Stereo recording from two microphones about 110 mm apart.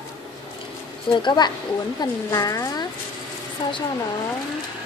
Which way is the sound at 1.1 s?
45° left (ahead or behind).